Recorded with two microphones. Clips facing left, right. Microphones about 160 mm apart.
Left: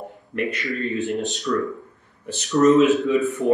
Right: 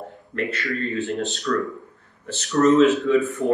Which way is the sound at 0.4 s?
15° left (ahead or behind).